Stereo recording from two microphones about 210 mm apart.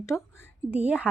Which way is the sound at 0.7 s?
5° right (ahead or behind).